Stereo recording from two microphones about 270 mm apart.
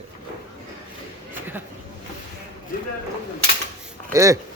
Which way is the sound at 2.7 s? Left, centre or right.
Left.